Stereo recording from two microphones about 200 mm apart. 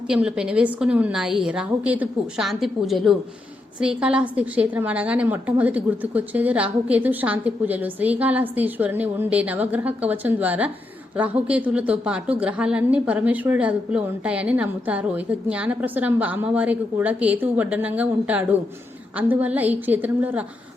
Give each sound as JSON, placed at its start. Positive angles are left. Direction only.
{"t": 0.1, "sound": "a woman's voice", "side_deg": -5}